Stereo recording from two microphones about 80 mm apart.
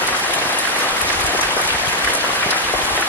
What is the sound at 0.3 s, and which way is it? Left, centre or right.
Applause, left.